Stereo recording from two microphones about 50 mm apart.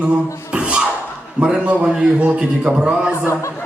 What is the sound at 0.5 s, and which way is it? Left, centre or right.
Music, centre.